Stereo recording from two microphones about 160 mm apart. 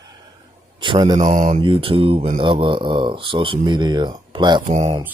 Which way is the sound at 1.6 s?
35° right (ahead or behind).